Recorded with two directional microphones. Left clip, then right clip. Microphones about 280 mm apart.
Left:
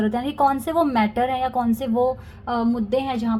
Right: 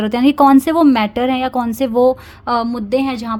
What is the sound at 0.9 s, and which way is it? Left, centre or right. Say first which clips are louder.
Speech: right 4 dB; right.